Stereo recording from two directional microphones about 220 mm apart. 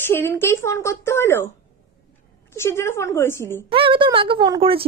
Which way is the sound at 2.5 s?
10° left (ahead or behind).